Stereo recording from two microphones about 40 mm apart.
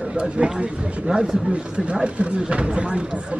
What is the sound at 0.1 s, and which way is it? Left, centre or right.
Speech, right.